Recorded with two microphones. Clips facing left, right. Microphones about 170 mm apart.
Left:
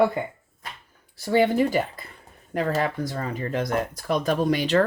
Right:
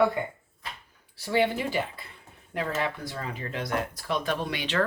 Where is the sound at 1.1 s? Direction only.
45° left (ahead or behind).